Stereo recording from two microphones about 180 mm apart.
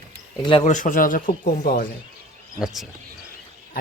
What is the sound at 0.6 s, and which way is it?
Speech, 45° left (ahead or behind).